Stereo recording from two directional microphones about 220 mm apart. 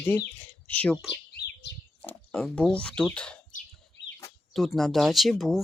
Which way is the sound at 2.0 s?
5° left (ahead or behind).